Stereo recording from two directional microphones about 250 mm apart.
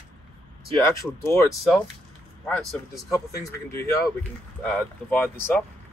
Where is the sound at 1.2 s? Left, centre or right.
Centre.